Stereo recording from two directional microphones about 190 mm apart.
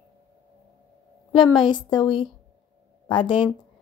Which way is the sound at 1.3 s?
25° left (ahead or behind).